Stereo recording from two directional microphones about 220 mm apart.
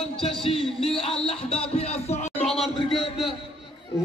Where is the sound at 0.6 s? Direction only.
Centre (ahead or behind).